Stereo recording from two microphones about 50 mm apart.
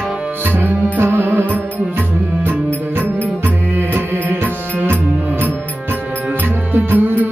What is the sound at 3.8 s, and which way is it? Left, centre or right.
Music, right.